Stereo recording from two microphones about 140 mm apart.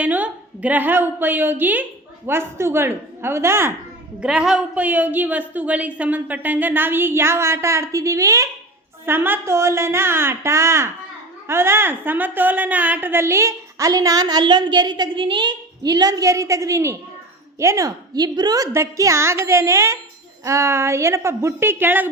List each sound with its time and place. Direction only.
0.0 s a woman's voice: 10° right (ahead or behind)
4.2 s a woman's voice: 5° right (ahead or behind)